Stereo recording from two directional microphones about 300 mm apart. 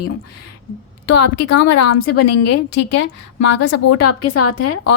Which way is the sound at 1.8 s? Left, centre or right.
Left.